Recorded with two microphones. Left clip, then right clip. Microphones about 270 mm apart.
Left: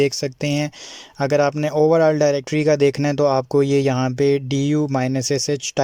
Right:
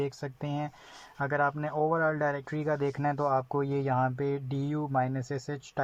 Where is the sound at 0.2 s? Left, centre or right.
Left.